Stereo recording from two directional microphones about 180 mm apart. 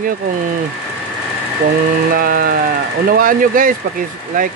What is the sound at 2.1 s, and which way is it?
Speech, 55° right (ahead or behind).